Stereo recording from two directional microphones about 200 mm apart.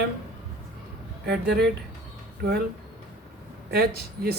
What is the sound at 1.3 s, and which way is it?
Speech, 55° right (ahead or behind).